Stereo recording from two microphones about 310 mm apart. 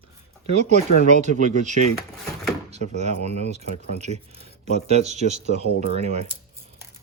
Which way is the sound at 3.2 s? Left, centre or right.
Right.